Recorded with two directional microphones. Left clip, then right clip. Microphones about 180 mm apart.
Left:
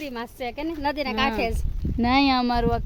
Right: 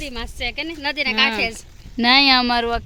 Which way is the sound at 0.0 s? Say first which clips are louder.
Right 4 dB; 25° left (ahead or behind).